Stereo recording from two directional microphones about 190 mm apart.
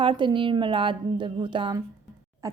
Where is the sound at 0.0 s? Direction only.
25° right (ahead or behind).